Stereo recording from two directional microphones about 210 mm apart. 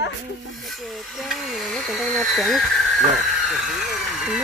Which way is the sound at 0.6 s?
Centre (ahead or behind).